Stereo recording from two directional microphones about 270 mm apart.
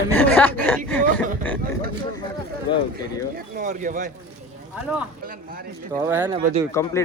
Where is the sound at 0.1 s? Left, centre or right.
Centre.